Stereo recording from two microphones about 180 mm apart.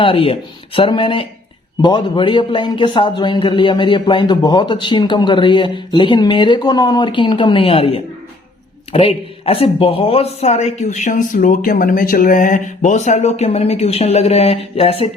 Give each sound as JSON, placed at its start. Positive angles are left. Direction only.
{"t": 0.0, "sound": "a man's voice", "side_deg": 30}